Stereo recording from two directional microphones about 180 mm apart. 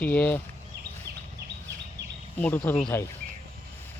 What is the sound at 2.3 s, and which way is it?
Speech, 10° left (ahead or behind).